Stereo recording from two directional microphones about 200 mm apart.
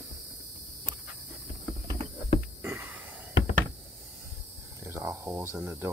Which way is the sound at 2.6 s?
10° right (ahead or behind).